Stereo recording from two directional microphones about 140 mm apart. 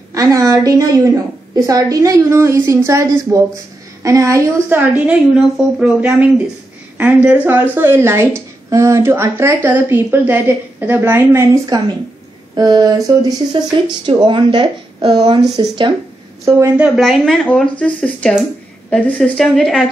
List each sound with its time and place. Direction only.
0.1 s a woman's voice: 25° right (ahead or behind)
11.7 s a woman's voice: 25° right (ahead or behind)
16.4 s a woman's voice: 20° right (ahead or behind)
17.0 s speech: 5° left (ahead or behind)